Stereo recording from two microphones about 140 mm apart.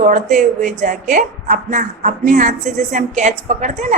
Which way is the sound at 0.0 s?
65° right (ahead or behind).